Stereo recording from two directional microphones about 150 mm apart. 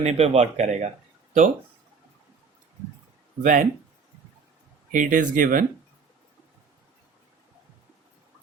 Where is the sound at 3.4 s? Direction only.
60° right (ahead or behind).